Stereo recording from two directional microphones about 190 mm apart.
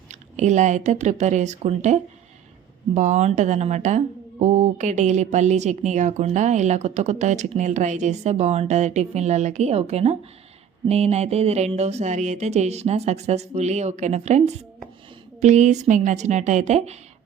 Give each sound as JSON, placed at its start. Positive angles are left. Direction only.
{"t": 0.1, "sound": "speech", "side_deg": -40}